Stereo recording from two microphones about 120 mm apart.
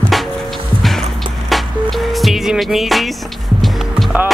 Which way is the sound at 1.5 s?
Centre (ahead or behind).